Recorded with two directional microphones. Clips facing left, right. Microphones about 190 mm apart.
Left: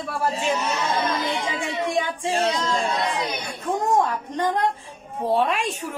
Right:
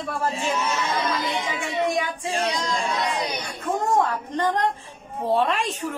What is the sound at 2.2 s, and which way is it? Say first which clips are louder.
Child singing: left 3 dB; 40° left (ahead or behind).